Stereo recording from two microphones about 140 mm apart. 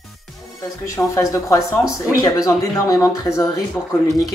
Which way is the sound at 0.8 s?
20° left (ahead or behind).